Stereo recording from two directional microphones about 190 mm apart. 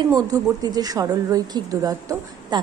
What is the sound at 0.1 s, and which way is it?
A woman's voice, 20° right (ahead or behind).